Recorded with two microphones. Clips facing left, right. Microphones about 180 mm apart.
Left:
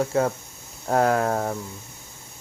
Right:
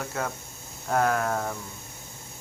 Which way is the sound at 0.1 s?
30° left (ahead or behind).